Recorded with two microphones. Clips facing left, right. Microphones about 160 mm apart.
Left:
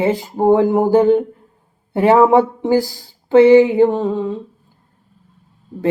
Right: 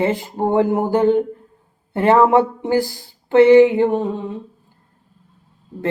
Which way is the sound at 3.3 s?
10° left (ahead or behind).